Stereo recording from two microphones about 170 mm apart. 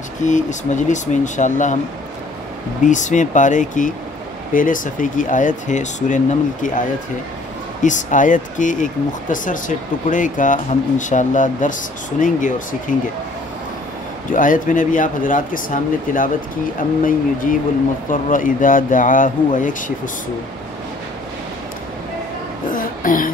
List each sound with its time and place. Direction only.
0.2 s speech: 45° left (ahead or behind)
2.8 s speech: 45° left (ahead or behind)
7.8 s speech: 50° left (ahead or behind)
14.3 s speech: 50° left (ahead or behind)
22.7 s a sound: 55° left (ahead or behind)